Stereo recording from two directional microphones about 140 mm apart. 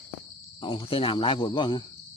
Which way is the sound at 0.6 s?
35° left (ahead or behind).